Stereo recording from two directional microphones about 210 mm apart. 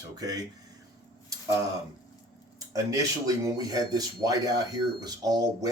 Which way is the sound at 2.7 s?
15° right (ahead or behind).